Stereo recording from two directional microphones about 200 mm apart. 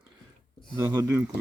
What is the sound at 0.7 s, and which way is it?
Speech, 20° right (ahead or behind).